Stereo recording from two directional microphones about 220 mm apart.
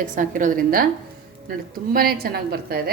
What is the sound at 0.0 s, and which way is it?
A woman's voice, 35° right (ahead or behind).